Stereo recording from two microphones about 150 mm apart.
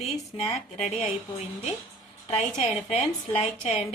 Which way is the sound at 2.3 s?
45° left (ahead or behind).